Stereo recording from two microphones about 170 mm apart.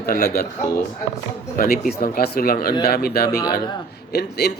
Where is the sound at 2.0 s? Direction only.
65° left (ahead or behind).